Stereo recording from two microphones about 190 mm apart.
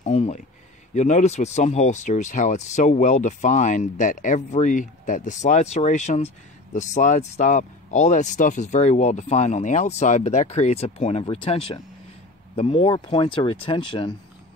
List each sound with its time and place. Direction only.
0.0 s speech: 35° left (ahead or behind)